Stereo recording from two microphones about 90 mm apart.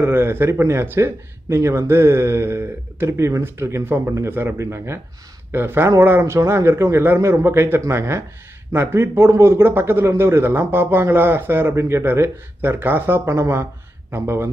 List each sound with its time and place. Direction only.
0.0 s speech: 25° right (ahead or behind)